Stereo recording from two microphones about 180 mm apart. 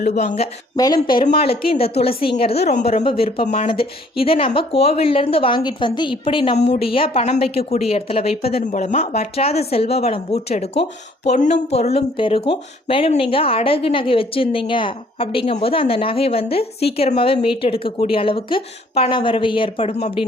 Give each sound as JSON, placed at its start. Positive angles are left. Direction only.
{"t": 0.0, "sound": "speech", "side_deg": 40}